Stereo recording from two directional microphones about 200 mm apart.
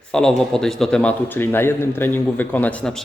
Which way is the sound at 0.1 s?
5° left (ahead or behind).